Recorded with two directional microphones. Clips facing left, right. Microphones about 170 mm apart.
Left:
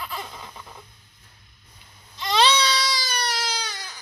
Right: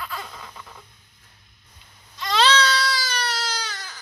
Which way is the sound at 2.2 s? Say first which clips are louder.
Right 1 dB; 15° left (ahead or behind).